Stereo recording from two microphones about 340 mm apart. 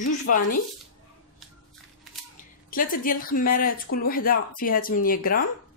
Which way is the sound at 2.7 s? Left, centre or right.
Left.